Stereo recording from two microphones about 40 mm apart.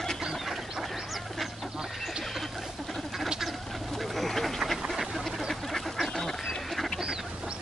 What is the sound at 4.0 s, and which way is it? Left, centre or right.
Bird, centre.